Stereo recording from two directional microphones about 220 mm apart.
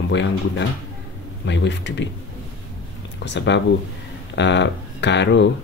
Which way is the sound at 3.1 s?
55° left (ahead or behind).